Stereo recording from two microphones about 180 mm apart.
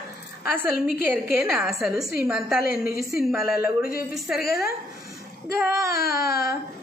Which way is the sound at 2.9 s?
15° right (ahead or behind).